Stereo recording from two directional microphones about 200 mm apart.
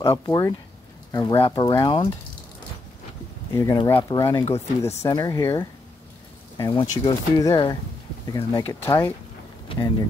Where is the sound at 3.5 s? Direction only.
15° left (ahead or behind).